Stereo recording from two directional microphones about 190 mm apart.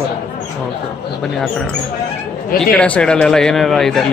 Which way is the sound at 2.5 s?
5° left (ahead or behind).